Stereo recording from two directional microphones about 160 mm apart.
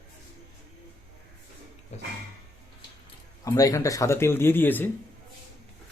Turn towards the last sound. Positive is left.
turn(degrees=10)  # may be behind; listen again after turning